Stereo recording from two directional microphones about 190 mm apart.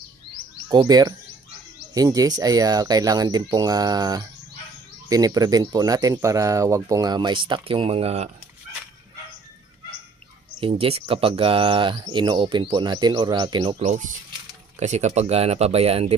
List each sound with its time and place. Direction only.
0.7 s speech: 20° right (ahead or behind)
10.6 s speech: 30° right (ahead or behind)
14.8 s speech: 35° right (ahead or behind)